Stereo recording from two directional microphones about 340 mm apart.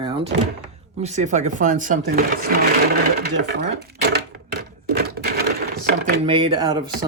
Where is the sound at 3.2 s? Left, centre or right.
Right.